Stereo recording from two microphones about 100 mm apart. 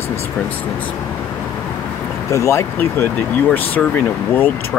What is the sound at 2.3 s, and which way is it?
Speech, 30° left (ahead or behind).